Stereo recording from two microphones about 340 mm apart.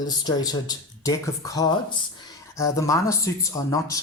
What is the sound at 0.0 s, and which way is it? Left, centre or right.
Speech, centre.